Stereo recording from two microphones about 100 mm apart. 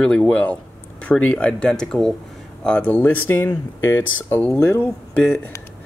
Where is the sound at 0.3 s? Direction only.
10° left (ahead or behind).